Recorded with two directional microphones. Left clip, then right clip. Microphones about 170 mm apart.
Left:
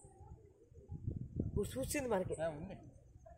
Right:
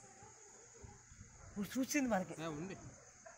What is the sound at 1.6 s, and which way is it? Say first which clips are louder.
Speech: right 1 dB; 30° left (ahead or behind).